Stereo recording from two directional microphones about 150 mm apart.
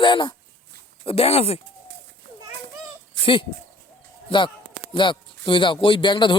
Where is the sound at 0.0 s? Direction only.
30° left (ahead or behind).